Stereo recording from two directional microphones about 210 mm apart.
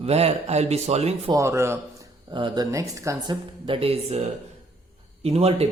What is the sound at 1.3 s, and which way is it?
Speech, 15° right (ahead or behind).